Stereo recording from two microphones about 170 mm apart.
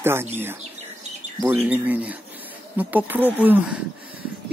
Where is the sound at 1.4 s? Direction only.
10° right (ahead or behind).